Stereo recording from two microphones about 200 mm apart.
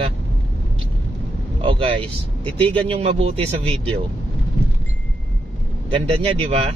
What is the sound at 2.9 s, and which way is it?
A man's voice, 30° right (ahead or behind).